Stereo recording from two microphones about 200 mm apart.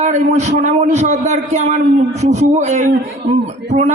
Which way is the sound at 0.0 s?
35° right (ahead or behind).